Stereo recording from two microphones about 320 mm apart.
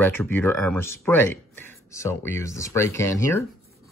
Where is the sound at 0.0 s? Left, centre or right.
Centre.